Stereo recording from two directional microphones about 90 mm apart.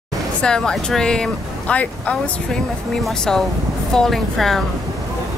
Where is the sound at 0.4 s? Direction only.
10° left (ahead or behind).